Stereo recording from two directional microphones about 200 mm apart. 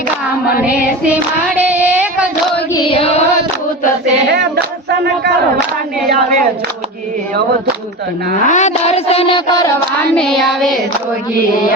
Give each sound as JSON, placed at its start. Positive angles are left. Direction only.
{"t": 1.1, "sound": "child singing", "side_deg": -10}
{"t": 2.7, "sound": "female singing", "side_deg": 25}
{"t": 4.9, "sound": "battle cry", "side_deg": -55}
{"t": 8.4, "sound": "a sound", "side_deg": 35}
{"t": 10.2, "sound": "child singing", "side_deg": 0}